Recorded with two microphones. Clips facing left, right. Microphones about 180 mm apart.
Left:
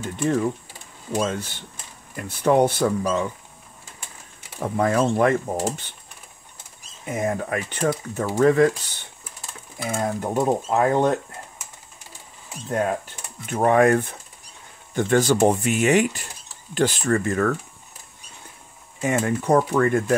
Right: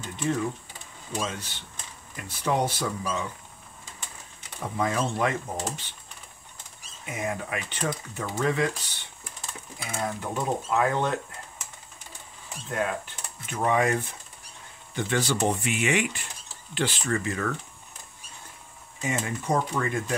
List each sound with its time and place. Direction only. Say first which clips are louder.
0.0 s speech: left 6 dB; 50° left (ahead or behind)
4.7 s speech: left 7 dB; 50° left (ahead or behind)
7.1 s speech: left 7 dB; 45° left (ahead or behind)
9.8 s speech: left 6 dB; 45° left (ahead or behind)
12.6 s speech: left 5 dB; 40° left (ahead or behind)
13.5 s speech: left 7 dB; 55° left (ahead or behind)
18.9 s speech: left 8 dB; 55° left (ahead or behind)